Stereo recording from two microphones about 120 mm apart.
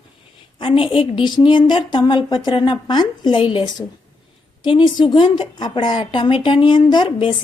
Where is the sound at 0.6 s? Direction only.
50° left (ahead or behind).